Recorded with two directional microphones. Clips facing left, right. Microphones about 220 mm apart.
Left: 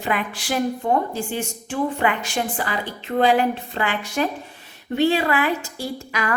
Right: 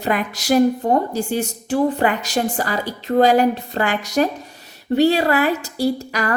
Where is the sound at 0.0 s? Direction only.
40° right (ahead or behind).